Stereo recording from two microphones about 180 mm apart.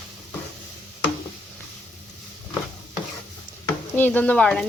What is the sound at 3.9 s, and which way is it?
Speech, 10° left (ahead or behind).